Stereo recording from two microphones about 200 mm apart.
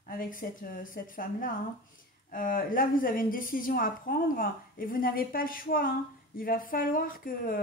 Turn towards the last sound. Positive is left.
turn(degrees=45)  # may be behind; listen again after turning